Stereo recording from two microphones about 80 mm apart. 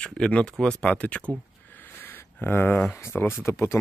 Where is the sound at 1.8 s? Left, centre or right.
Left.